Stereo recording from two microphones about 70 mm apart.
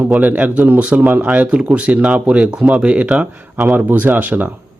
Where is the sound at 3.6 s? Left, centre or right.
Right.